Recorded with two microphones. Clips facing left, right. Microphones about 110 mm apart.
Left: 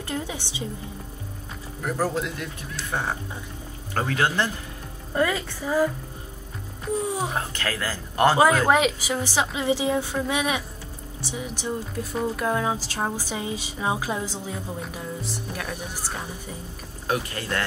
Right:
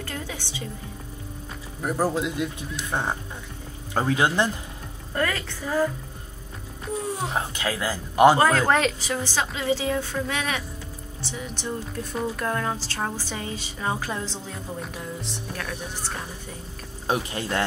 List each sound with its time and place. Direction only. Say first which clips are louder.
0.1 s music: left 3 dB; 15° left (ahead or behind)
1.8 s a man's voice: right 1 dB; 15° right (ahead or behind)
5.1 s speech: left 3 dB; 10° left (ahead or behind)
7.1 s speech: left 2 dB; 10° left (ahead or behind)
7.3 s a man's voice: right 1 dB; 15° right (ahead or behind)
8.4 s speech: left 2 dB; 10° left (ahead or behind)
17.1 s speech: right 1 dB; 25° right (ahead or behind)